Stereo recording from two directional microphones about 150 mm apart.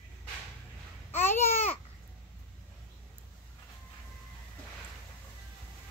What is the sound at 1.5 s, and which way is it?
Babbling, 45° left (ahead or behind).